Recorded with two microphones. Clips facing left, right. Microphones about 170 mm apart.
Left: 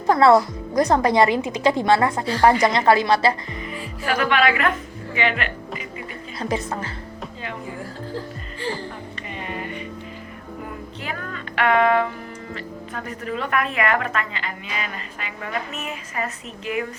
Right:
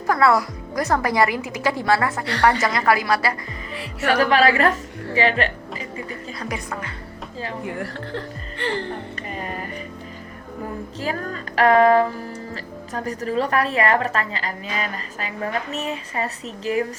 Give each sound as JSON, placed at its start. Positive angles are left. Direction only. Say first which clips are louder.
{"t": 0.1, "sound": "speech", "louder": "left 4 dB", "side_deg": 25}
{"t": 3.8, "sound": "speech", "louder": "right 4 dB", "side_deg": -75}
{"t": 4.2, "sound": "a woman's voice", "louder": "right 3 dB", "side_deg": -35}
{"t": 6.4, "sound": "speech", "louder": "left 6 dB", "side_deg": 25}
{"t": 7.6, "sound": "speech", "louder": "right 3 dB", "side_deg": -70}
{"t": 9.4, "sound": "music", "louder": "left 2 dB", "side_deg": -40}
{"t": 11.0, "sound": "music", "louder": "right 6 dB", "side_deg": -35}
{"t": 12.9, "sound": "a woman's voice", "louder": "right 5 dB", "side_deg": -35}